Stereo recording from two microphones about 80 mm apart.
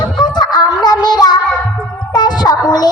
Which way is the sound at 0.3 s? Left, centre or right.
Left.